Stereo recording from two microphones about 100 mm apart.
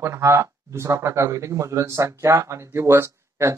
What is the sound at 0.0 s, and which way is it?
Speech, 30° right (ahead or behind).